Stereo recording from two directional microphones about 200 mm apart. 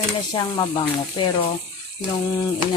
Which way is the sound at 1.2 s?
20° left (ahead or behind).